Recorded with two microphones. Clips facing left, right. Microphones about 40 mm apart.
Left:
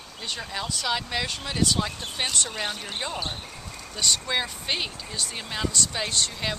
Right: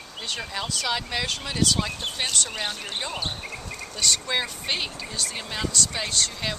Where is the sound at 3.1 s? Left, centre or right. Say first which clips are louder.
Even; right.